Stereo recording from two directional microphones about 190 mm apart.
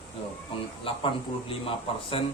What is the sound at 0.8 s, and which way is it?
Speech, 30° left (ahead or behind).